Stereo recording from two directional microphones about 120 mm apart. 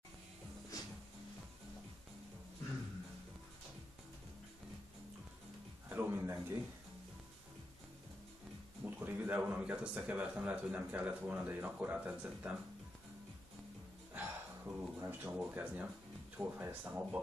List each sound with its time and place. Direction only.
5.9 s music: 20° right (ahead or behind)
8.8 s a man's voice: 15° right (ahead or behind)
14.1 s a sound: 15° right (ahead or behind)
16.3 s a man's voice: 15° right (ahead or behind)